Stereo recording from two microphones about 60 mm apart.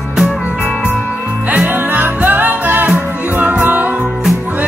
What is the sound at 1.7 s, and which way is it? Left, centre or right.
Music, right.